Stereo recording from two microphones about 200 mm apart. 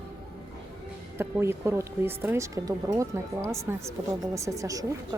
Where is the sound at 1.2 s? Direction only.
10° right (ahead or behind).